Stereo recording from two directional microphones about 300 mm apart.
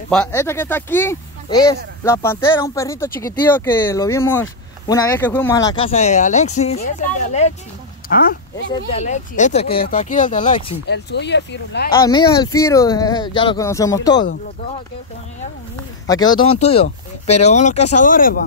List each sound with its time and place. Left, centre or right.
0.1 s speech: centre; by 11.9 s left
12.0 s speech: centre
15.7 s speech: centre